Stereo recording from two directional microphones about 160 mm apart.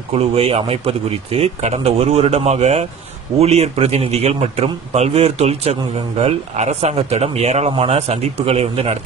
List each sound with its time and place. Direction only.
0.1 s a man's voice: 40° right (ahead or behind)